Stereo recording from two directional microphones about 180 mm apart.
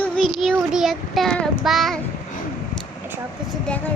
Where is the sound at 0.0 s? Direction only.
5° left (ahead or behind).